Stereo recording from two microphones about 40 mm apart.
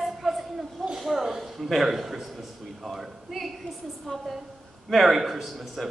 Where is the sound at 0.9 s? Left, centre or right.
Centre.